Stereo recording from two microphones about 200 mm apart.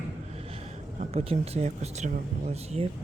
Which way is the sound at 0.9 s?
30° right (ahead or behind).